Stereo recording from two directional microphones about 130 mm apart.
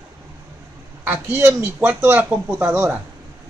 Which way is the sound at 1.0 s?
15° right (ahead or behind).